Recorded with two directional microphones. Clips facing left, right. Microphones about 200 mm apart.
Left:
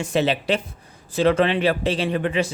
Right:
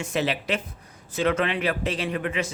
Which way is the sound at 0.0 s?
30° left (ahead or behind).